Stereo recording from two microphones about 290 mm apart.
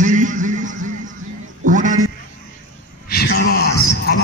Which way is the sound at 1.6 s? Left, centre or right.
Right.